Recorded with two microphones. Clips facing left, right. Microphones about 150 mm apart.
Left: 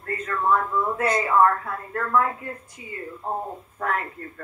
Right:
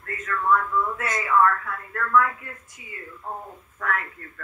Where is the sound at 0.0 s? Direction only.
30° left (ahead or behind).